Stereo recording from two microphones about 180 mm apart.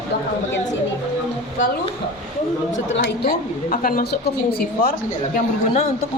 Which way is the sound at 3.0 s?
50° left (ahead or behind).